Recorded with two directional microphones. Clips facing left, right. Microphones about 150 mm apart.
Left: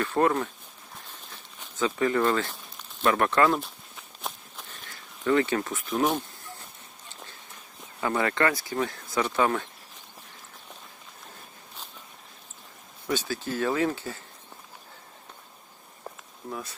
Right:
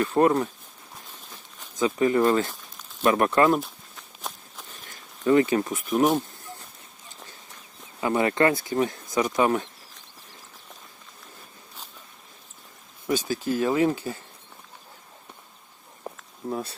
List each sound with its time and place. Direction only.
0.0 s speech: 20° right (ahead or behind)
1.7 s speech: 15° right (ahead or behind)
4.9 s a sound: 20° right (ahead or behind)
5.6 s speech: 15° right (ahead or behind)
8.0 s speech: 20° right (ahead or behind)
13.1 s speech: 15° right (ahead or behind)
16.1 s a sound: 20° right (ahead or behind)
16.5 s speech: 30° right (ahead or behind)